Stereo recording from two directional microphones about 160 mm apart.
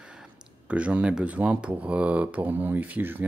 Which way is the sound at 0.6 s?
10° right (ahead or behind).